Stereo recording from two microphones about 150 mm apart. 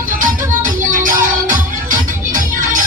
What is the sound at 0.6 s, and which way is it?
Music, 60° right (ahead or behind).